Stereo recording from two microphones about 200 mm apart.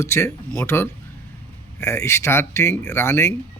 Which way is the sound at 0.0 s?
15° left (ahead or behind).